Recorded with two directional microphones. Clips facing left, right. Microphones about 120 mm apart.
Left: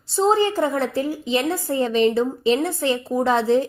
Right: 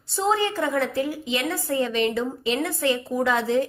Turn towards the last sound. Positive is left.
turn(degrees=30)  # may be behind; listen again after turning